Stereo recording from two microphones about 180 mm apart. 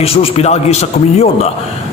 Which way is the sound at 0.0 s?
35° left (ahead or behind).